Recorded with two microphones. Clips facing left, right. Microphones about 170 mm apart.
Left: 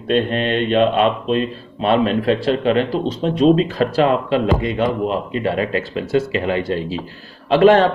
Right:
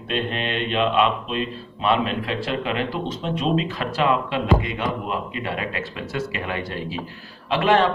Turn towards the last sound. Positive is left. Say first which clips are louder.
# left 7 dB
turn(degrees=40)  # may be behind; listen again after turning